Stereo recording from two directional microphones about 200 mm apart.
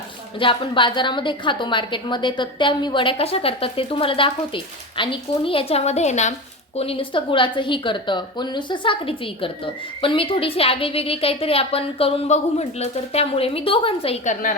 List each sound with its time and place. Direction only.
0.3 s a woman's voice: 25° left (ahead or behind)